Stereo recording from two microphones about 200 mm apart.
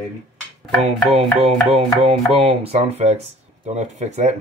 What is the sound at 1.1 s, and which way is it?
Speech, 30° right (ahead or behind).